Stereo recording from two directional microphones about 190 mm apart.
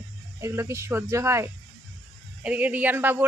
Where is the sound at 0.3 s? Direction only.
15° right (ahead or behind).